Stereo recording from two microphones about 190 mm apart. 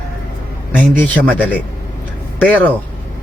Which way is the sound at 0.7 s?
10° left (ahead or behind).